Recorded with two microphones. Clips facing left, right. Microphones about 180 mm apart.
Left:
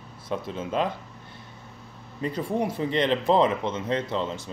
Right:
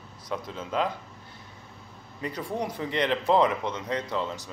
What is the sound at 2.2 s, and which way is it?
Speech, 25° left (ahead or behind).